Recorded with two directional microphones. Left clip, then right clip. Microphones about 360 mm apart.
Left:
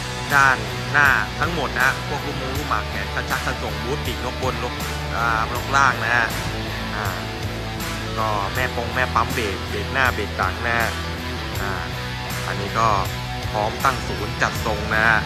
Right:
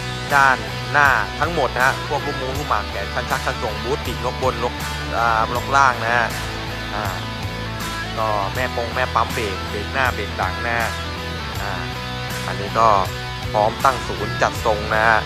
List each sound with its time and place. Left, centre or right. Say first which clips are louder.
0.3 s speech: right 1 dB; centre
5.2 s speech: right 3 dB; centre
8.5 s speech: right 1 dB; centre
12.7 s speech: right 5 dB; centre
14.9 s speech: right 1 dB; centre